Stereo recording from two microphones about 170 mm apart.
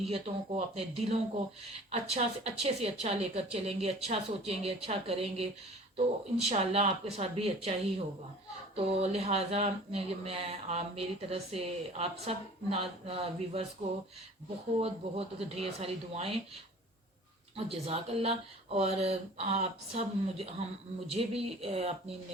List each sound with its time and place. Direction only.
0.1 s speech: 40° right (ahead or behind)
14.8 s speech: 35° right (ahead or behind)
17.6 s speech: 35° right (ahead or behind)